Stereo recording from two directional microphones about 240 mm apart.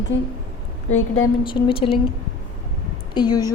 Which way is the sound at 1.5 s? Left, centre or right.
Left.